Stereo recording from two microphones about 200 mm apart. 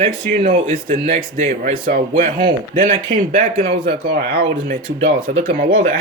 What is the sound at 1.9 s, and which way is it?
Speech, 45° right (ahead or behind).